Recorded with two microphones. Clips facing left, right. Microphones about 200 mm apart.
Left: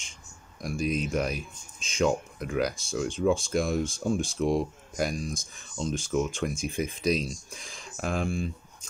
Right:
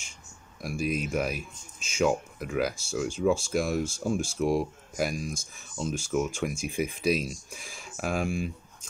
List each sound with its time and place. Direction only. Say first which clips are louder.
0.6 s speech: left 1 dB; 5° right (ahead or behind)